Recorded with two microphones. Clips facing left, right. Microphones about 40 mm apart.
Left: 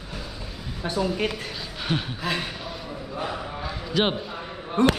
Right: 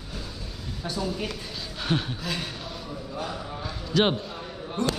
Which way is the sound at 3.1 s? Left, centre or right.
Left.